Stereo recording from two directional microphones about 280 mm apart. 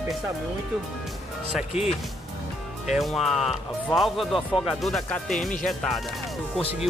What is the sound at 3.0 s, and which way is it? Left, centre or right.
Speech, centre.